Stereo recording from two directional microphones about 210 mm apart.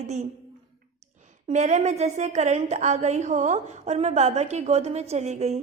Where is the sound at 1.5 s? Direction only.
35° right (ahead or behind).